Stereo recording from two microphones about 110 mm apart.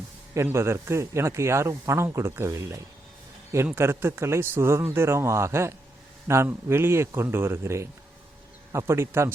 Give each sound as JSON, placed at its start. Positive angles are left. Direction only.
{"t": 0.3, "sound": "speech", "side_deg": -25}
{"t": 8.9, "sound": "speech", "side_deg": -25}